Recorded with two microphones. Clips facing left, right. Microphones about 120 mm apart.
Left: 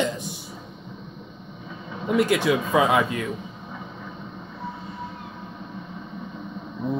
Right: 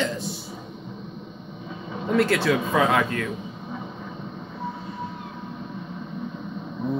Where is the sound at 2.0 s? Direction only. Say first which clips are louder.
Even; 15° left (ahead or behind).